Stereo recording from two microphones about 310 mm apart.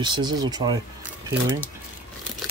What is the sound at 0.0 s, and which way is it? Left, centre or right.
Speech, centre.